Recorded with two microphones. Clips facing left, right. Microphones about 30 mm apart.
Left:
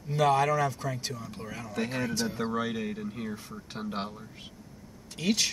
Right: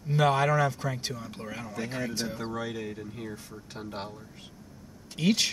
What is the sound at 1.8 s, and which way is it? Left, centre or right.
Speech, left.